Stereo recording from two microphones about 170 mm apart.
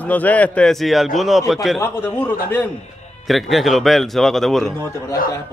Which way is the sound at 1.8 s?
10° left (ahead or behind).